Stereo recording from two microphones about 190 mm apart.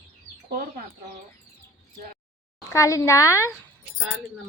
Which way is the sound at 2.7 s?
15° left (ahead or behind).